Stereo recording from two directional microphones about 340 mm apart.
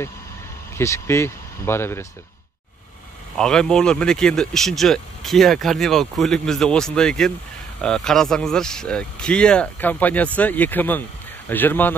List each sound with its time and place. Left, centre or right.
0.7 s speech: centre
3.3 s speech: centre